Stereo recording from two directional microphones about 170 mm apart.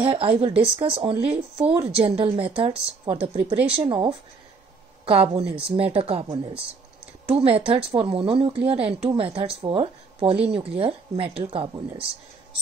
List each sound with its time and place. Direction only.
0.0 s a woman's voice: 35° right (ahead or behind)